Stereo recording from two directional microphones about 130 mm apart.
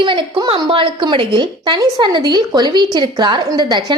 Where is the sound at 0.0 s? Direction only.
40° right (ahead or behind).